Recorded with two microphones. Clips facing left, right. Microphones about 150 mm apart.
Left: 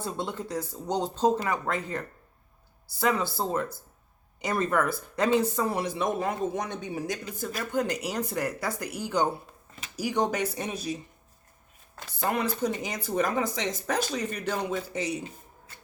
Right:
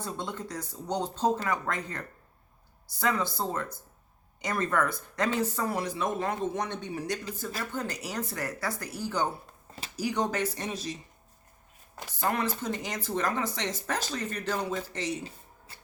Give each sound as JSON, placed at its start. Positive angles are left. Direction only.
{"t": 0.0, "sound": "speech", "side_deg": 10}
{"t": 12.3, "sound": "speech", "side_deg": 15}